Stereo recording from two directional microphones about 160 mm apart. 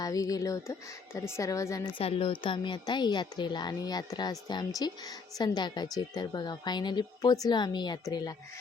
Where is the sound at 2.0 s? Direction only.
35° left (ahead or behind).